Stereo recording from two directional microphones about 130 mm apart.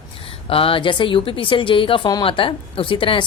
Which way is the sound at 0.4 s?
45° left (ahead or behind).